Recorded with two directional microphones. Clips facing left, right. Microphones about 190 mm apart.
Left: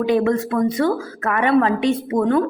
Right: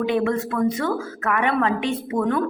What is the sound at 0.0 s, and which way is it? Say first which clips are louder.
A woman's voice: left 4 dB; 40° left (ahead or behind).